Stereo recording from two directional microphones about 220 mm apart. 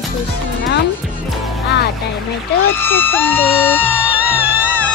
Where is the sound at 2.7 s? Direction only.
10° left (ahead or behind).